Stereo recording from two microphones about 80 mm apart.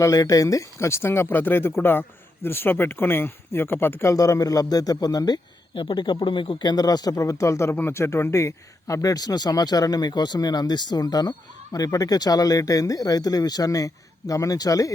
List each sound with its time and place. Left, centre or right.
0.0 s speech: left
4.1 s speech: left